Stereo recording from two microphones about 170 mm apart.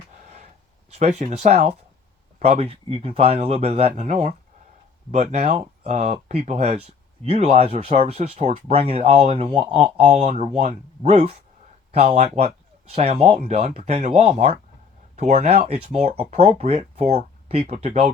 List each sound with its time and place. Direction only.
0.9 s speech: 40° right (ahead or behind)